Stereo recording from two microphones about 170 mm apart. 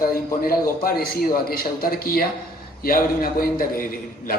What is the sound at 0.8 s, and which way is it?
A man's voice, 60° left (ahead or behind).